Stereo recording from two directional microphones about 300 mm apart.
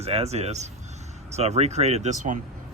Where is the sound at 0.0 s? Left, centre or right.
Right.